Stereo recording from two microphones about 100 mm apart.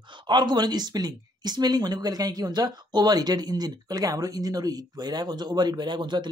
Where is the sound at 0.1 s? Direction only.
50° right (ahead or behind).